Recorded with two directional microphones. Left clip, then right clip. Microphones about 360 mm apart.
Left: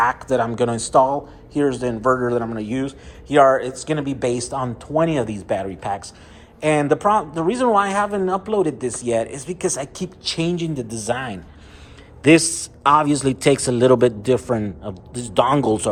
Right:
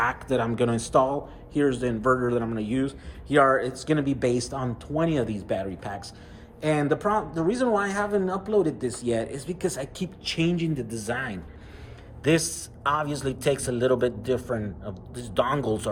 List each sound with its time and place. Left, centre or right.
0.0 s a man's voice: centre
9.8 s a woman's voice: left
10.2 s a man's voice: centre